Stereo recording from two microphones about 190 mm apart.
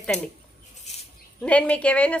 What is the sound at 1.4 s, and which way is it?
Speech, 5° left (ahead or behind).